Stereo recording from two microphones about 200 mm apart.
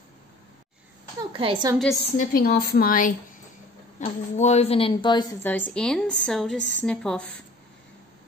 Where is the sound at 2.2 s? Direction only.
45° left (ahead or behind); by 5.3 s 20° left (ahead or behind).